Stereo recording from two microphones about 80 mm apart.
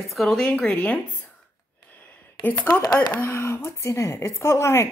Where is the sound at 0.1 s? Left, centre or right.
Centre.